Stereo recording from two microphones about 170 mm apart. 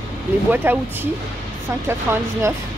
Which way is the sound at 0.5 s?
10° right (ahead or behind).